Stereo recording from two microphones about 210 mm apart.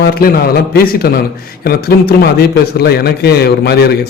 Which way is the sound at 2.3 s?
50° left (ahead or behind).